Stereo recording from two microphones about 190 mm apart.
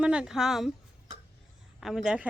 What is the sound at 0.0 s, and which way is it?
Speech, 5° right (ahead or behind).